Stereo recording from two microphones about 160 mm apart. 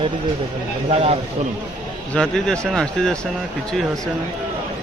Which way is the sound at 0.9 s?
40° right (ahead or behind).